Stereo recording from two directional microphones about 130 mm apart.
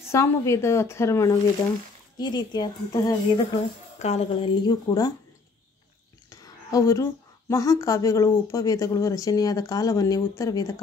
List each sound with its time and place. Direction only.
0.1 s a woman's voice: 20° left (ahead or behind)
2.1 s a woman's voice: 35° left (ahead or behind)
4.0 s a woman's voice: 55° left (ahead or behind); by 5.1 s 30° left (ahead or behind)
6.4 s a woman's voice: 25° left (ahead or behind)